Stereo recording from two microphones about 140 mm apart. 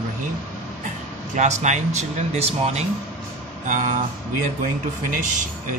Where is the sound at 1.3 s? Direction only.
60° right (ahead or behind).